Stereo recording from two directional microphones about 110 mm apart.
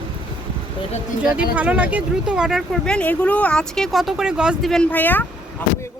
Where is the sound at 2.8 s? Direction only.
10° left (ahead or behind); by 4.7 s 5° right (ahead or behind).